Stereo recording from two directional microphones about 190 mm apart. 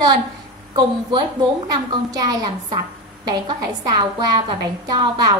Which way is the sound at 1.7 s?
20° right (ahead or behind).